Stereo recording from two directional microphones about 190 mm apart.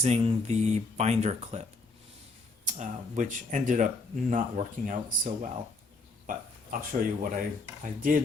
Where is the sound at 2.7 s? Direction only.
40° right (ahead or behind).